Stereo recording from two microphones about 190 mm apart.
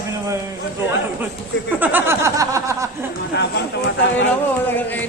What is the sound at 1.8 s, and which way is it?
Snicker, 10° right (ahead or behind).